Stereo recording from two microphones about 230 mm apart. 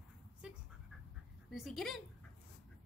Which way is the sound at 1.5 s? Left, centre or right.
Centre.